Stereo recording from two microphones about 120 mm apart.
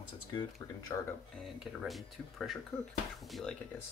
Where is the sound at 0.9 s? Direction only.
25° left (ahead or behind).